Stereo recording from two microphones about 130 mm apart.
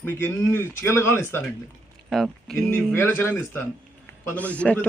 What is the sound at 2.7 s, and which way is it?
Speech, 15° left (ahead or behind).